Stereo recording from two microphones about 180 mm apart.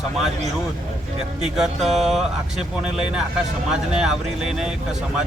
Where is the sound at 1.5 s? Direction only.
Centre (ahead or behind).